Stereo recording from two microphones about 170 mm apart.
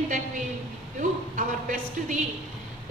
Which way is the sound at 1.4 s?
50° right (ahead or behind).